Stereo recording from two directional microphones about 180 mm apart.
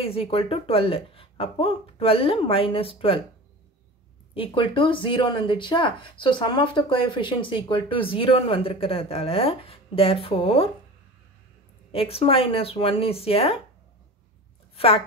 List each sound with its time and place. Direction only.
0.0 s speech: 30° left (ahead or behind)
4.3 s speech: 30° left (ahead or behind)
11.9 s speech: 30° left (ahead or behind)